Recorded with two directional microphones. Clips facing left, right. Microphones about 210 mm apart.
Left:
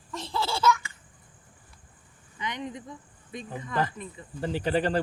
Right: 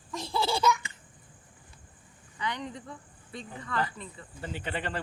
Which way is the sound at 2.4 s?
20° left (ahead or behind).